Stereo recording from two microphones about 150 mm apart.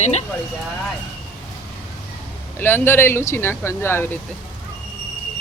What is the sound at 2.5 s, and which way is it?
Speech, 15° left (ahead or behind).